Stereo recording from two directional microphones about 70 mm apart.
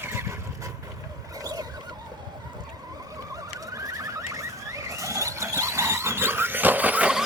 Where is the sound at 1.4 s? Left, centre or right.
Right.